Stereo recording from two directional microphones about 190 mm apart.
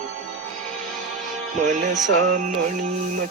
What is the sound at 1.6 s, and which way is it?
Music, 40° right (ahead or behind).